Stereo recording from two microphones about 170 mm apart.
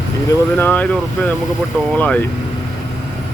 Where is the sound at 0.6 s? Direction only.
10° left (ahead or behind).